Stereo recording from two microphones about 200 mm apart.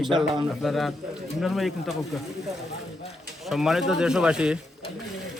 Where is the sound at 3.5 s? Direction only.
Centre (ahead or behind).